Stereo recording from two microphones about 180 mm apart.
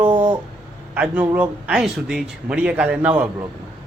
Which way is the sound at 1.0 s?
10° right (ahead or behind).